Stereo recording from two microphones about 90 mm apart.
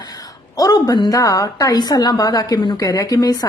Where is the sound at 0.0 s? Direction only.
45° left (ahead or behind).